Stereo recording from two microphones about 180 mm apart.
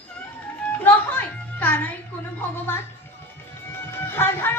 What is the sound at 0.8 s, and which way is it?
Music, 10° left (ahead or behind).